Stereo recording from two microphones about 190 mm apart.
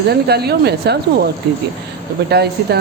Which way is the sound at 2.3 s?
55° right (ahead or behind).